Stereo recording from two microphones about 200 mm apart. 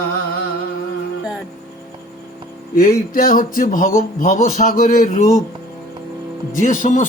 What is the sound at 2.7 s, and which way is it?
Speech, 45° left (ahead or behind).